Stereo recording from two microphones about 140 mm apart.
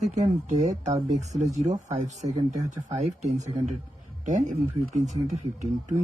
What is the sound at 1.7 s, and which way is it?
Speech, 60° right (ahead or behind).